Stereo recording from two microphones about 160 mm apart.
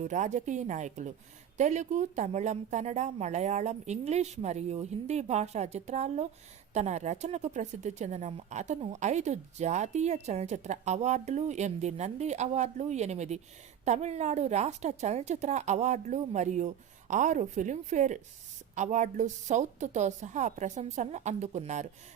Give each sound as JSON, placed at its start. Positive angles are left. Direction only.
{"t": 0.0, "sound": "a woman's voice", "side_deg": -50}